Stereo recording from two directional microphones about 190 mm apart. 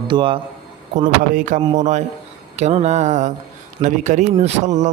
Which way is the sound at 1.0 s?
45° right (ahead or behind).